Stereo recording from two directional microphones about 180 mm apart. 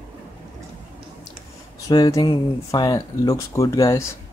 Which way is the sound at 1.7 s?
20° left (ahead or behind).